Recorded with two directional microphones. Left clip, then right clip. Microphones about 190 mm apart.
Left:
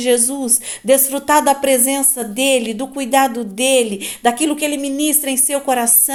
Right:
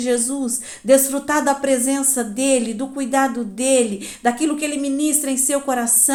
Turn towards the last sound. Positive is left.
turn(degrees=30)  # may be behind; listen again after turning